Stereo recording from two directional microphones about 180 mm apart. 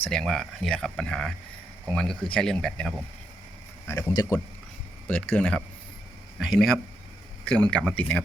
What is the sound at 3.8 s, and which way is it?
Speech, 20° left (ahead or behind).